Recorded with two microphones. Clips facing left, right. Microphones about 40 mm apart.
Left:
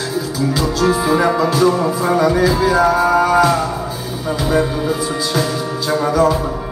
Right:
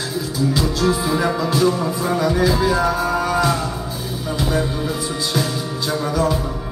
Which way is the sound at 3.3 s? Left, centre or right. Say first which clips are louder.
Left 6 dB; centre.